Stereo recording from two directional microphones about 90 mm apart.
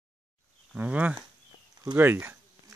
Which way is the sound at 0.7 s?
15° right (ahead or behind).